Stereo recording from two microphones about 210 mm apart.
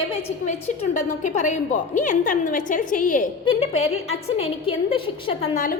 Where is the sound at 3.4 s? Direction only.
25° left (ahead or behind).